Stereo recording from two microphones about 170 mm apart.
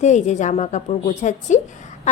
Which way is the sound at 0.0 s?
45° left (ahead or behind).